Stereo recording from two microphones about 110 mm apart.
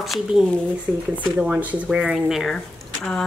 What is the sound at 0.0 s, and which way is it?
Speech, centre (ahead or behind).